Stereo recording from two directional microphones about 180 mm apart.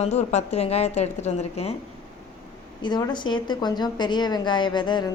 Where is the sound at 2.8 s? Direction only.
25° left (ahead or behind).